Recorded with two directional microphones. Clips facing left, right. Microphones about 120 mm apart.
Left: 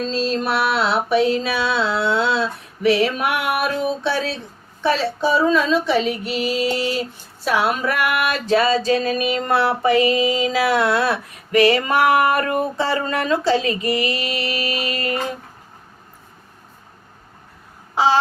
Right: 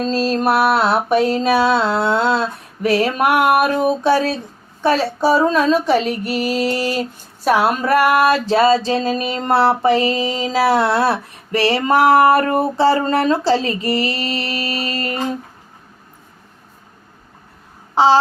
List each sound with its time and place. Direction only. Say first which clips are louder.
0.0 s music: right 4 dB; 45° right (ahead or behind)
4.8 s female singing: right 3 dB; 45° right (ahead or behind)
17.9 s a sound: right 5 dB; 30° right (ahead or behind)